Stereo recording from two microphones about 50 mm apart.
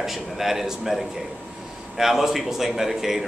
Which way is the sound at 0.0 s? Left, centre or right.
Centre.